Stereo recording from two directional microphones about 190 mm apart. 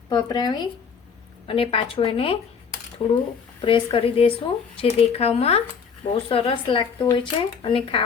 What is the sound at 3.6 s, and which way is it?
Speech, 25° left (ahead or behind).